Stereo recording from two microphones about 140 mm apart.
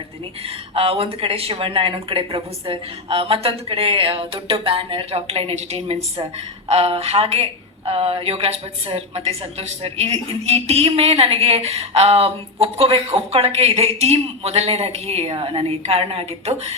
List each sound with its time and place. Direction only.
0.4 s a woman's voice: 45° right (ahead or behind)